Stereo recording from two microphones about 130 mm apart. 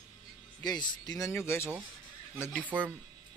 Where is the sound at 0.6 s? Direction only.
30° left (ahead or behind).